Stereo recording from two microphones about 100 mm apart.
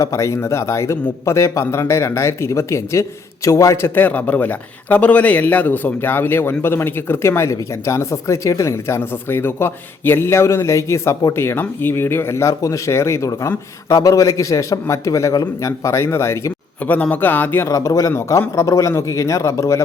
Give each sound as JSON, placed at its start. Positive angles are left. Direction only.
{"t": 0.0, "sound": "a man's voice", "side_deg": 30}
{"t": 16.8, "sound": "speech", "side_deg": 15}
{"t": 17.7, "sound": "a man's voice", "side_deg": 35}